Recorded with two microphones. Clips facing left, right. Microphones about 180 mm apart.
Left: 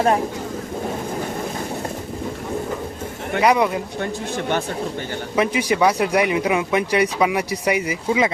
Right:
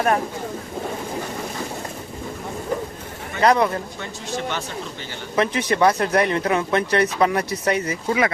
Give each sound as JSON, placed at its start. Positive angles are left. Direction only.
{"t": 3.4, "sound": "speech", "side_deg": 10}
{"t": 4.0, "sound": "speech", "side_deg": 50}
{"t": 5.4, "sound": "speech", "side_deg": 10}